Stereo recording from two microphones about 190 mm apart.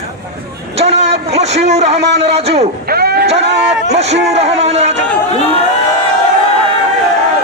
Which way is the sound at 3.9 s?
35° right (ahead or behind).